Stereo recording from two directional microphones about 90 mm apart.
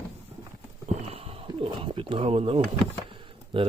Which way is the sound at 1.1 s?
90° right.